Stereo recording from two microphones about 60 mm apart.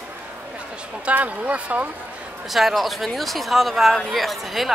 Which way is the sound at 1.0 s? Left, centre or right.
Right.